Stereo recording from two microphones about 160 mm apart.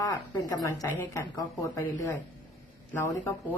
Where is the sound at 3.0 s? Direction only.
10° left (ahead or behind).